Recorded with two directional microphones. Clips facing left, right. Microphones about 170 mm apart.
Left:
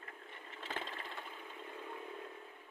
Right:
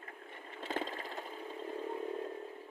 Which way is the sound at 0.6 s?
45° right (ahead or behind).